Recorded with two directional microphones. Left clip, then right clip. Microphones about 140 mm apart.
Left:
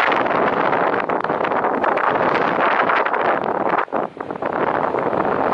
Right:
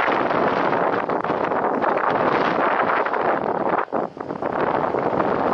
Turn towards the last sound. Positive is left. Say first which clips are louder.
# left 2 dB
turn(degrees=-35)  # may be behind; listen again after turning